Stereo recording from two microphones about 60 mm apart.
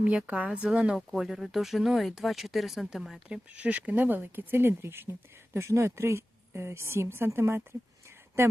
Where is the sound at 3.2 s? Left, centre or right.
Right.